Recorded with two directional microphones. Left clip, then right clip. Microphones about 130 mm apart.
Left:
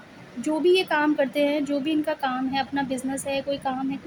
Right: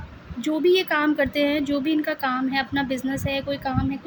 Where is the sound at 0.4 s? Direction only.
55° right (ahead or behind).